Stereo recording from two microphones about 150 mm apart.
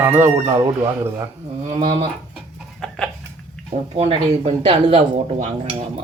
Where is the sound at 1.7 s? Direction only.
35° right (ahead or behind).